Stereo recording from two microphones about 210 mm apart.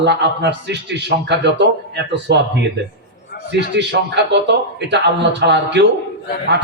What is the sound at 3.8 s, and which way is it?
A man's voice, 55° right (ahead or behind).